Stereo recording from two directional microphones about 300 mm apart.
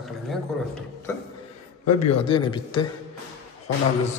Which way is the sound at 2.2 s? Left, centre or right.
Centre.